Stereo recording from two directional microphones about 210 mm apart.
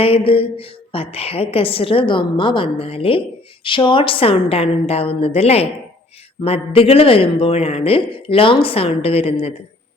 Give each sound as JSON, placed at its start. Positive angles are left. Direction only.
{"t": 0.0, "sound": "a woman's voice", "side_deg": 25}